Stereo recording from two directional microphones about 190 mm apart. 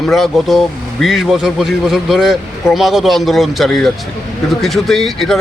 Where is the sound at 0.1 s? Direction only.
Centre (ahead or behind).